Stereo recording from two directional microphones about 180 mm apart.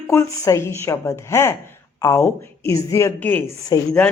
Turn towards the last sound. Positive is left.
turn(degrees=15)  # may be behind; listen again after turning